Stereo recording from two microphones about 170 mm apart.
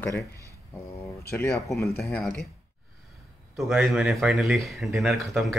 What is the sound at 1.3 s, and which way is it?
Speech, 15° left (ahead or behind).